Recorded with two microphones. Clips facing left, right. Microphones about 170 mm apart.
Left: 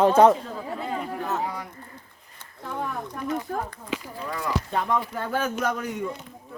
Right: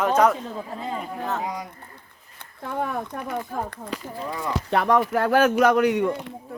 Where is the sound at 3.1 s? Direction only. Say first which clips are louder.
Even; 60° right (ahead or behind).